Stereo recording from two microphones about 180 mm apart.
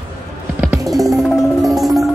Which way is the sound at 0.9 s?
Centre (ahead or behind).